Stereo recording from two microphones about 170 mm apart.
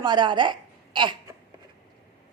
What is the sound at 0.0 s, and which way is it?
A woman's voice, 25° right (ahead or behind).